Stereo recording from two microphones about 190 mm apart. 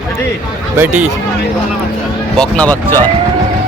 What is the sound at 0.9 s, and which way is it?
Speech, 40° right (ahead or behind).